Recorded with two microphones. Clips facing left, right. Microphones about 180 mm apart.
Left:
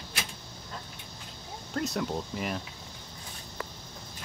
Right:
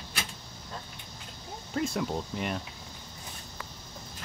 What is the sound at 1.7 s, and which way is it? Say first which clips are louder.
Speech: right 1 dB; centre (ahead or behind).